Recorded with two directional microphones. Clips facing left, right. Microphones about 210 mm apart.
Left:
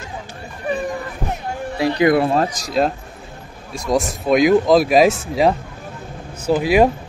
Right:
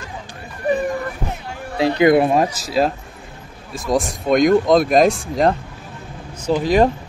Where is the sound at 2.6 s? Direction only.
Centre (ahead or behind).